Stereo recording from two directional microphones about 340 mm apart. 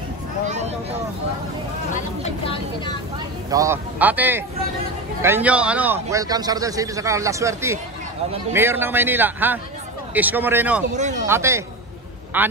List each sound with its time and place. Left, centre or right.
2.2 s speech: centre
3.4 s a man's voice: centre
11.0 s speech: right
11.2 s a man's voice: centre